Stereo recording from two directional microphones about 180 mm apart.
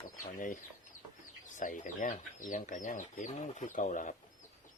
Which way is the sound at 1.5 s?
45° left (ahead or behind).